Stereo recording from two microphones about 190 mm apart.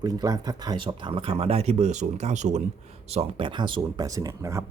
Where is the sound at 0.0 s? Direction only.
20° right (ahead or behind).